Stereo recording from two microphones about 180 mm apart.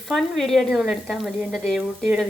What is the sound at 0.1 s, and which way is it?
A woman's voice, centre (ahead or behind).